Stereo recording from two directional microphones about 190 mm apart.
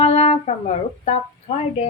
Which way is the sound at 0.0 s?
35° left (ahead or behind).